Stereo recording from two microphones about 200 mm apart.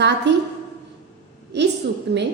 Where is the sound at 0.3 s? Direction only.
60° right (ahead or behind).